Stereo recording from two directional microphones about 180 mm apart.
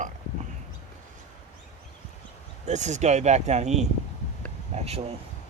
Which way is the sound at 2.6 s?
40° right (ahead or behind).